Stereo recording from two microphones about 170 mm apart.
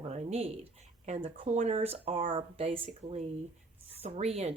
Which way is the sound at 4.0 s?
35° right (ahead or behind).